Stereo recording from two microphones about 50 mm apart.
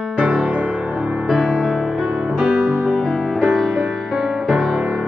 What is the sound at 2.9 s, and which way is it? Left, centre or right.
Music, centre.